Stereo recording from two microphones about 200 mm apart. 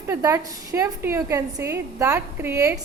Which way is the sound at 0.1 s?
15° right (ahead or behind).